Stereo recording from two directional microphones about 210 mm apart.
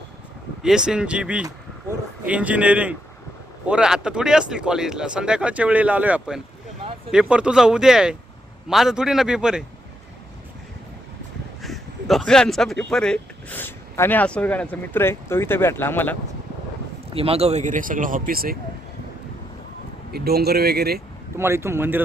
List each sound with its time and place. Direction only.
0.6 s a man's voice: 5° right (ahead or behind)
11.6 s speech: centre (ahead or behind)
17.1 s speech: 25° right (ahead or behind); by 18.5 s 45° right (ahead or behind)
20.1 s speech: 50° right (ahead or behind)
21.3 s a man's voice: 10° right (ahead or behind)